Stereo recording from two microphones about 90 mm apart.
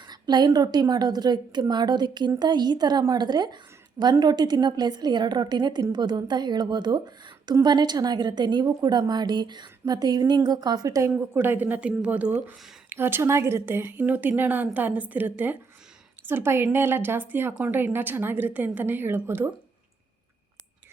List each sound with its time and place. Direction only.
0.0 s a woman's voice: 50° right (ahead or behind)
11.3 s a woman's voice: 20° right (ahead or behind)